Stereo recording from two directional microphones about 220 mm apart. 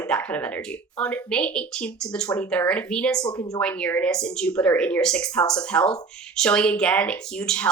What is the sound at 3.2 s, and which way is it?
Speech, 20° left (ahead or behind).